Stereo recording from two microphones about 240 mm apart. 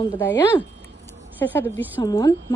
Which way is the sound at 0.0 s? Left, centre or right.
Centre.